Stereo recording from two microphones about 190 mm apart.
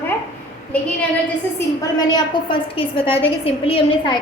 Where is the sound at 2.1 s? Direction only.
25° left (ahead or behind).